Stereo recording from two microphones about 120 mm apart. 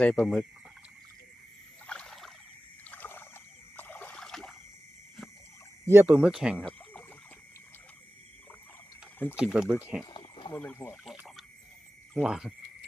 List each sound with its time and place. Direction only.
0.0 s speech: 10° left (ahead or behind)
1.9 s rowboat: 5° left (ahead or behind)
2.8 s trickle: 15° left (ahead or behind)
3.8 s a sound: 15° left (ahead or behind)
5.8 s speech: 20° right (ahead or behind)
6.1 s speech: 10° right (ahead or behind)
9.3 s speech: 5° right (ahead or behind)
10.1 s a sound: 50° left (ahead or behind)
10.5 s speech: 15° left (ahead or behind)
12.2 s cricket: 5° right (ahead or behind)